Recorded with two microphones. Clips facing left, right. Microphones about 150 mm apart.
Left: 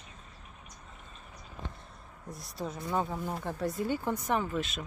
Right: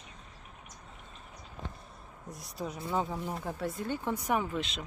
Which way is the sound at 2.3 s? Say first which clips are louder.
Left 1 dB; 30° left (ahead or behind).